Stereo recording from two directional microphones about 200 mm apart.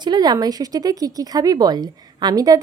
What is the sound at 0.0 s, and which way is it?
Speech, 20° right (ahead or behind).